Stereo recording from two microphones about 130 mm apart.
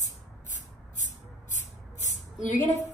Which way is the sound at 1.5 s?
70° left (ahead or behind).